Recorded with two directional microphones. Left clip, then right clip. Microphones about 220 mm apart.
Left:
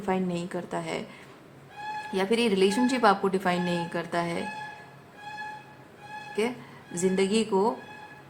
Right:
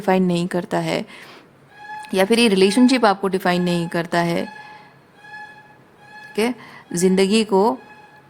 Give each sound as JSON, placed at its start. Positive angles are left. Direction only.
{"t": 0.0, "sound": "a woman's voice", "side_deg": -45}
{"t": 6.9, "sound": "a woman's voice", "side_deg": -45}